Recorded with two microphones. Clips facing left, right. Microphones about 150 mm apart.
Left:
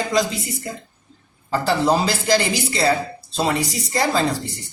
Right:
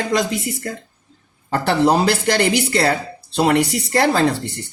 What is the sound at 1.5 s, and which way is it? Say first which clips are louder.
Speech: right 2 dB; 65° right (ahead or behind).